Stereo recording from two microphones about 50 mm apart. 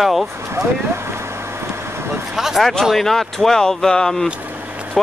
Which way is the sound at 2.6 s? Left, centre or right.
Centre.